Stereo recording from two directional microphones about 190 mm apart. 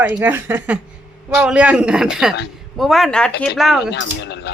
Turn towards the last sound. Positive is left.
turn(degrees=60)  # may be behind; listen again after turning